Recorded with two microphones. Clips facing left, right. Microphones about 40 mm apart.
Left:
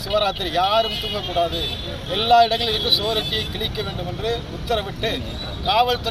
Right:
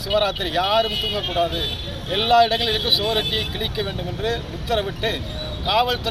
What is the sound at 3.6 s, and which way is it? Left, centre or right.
Speech, centre.